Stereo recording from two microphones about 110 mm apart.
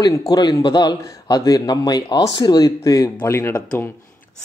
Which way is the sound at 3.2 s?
25° left (ahead or behind).